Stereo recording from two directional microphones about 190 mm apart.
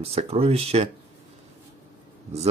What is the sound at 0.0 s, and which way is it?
Speech, 30° right (ahead or behind).